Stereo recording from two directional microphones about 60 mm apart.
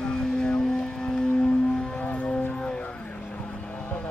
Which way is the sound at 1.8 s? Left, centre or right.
Centre.